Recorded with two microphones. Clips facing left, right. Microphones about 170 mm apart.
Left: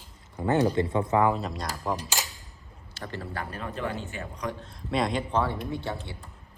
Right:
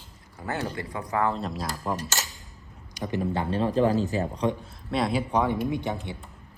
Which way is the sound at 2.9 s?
15° right (ahead or behind).